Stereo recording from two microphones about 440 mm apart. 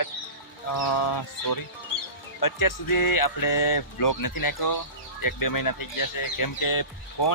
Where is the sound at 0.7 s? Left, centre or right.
Left.